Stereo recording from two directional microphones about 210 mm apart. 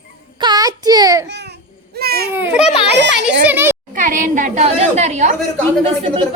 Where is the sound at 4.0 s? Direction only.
40° right (ahead or behind).